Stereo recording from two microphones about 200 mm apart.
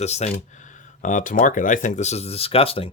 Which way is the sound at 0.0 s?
35° left (ahead or behind).